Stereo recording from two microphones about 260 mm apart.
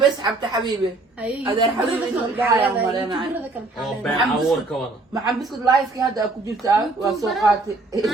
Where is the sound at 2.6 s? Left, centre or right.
Centre.